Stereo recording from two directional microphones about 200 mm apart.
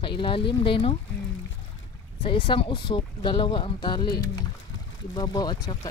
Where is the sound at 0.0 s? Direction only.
25° left (ahead or behind).